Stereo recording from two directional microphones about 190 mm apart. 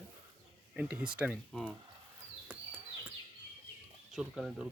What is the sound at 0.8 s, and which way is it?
Speech, 5° right (ahead or behind).